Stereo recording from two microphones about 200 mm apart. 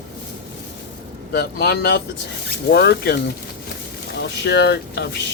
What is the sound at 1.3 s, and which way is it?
Speech, 55° left (ahead or behind).